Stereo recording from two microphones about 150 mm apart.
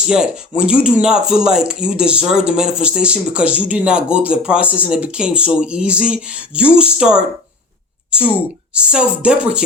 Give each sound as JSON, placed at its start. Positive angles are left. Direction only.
{"t": 0.1, "sound": "speech", "side_deg": -5}
{"t": 8.7, "sound": "speech", "side_deg": -5}